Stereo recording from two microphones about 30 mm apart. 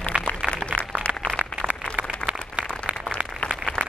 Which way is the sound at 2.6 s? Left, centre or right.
Right.